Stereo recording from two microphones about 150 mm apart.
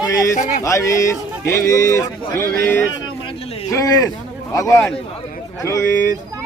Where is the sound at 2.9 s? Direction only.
35° left (ahead or behind).